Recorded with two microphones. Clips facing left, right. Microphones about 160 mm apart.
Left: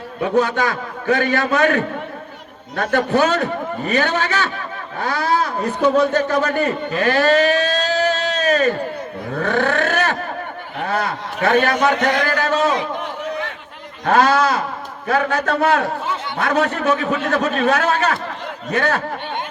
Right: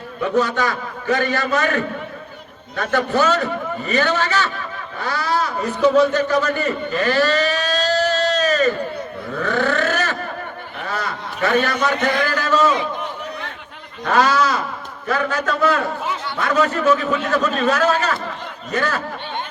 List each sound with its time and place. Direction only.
0.2 s a man's voice: 55° left (ahead or behind)
9.3 s a sound: 55° left (ahead or behind)
14.0 s a man's voice: 50° left (ahead or behind)